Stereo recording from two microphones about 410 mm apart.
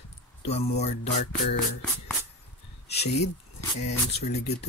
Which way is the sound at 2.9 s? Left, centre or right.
Centre.